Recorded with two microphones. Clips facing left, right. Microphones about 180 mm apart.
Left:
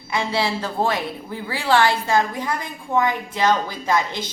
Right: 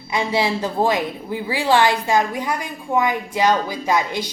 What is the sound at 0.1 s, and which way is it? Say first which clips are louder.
A woman's voice: right 2 dB; 15° right (ahead or behind).